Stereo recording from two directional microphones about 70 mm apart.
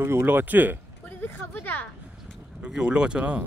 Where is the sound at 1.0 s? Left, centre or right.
Left.